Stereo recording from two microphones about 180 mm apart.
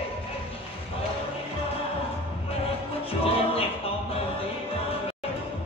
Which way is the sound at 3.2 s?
30° left (ahead or behind).